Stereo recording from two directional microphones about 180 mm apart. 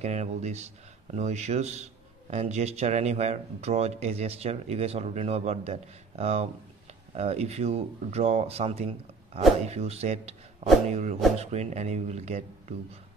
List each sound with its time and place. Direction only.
0.0 s a man's voice: 40° right (ahead or behind)